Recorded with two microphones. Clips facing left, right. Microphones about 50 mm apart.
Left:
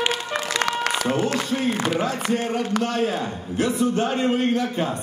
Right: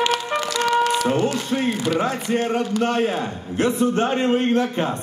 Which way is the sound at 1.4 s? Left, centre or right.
Right.